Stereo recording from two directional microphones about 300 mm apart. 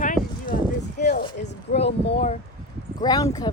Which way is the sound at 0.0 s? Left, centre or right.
Left.